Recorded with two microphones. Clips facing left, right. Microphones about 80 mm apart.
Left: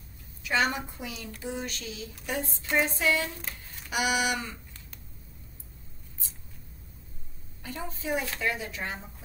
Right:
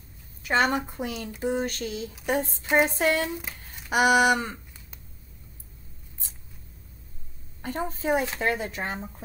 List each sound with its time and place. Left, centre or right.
0.4 s a woman's voice: right
7.6 s a woman's voice: right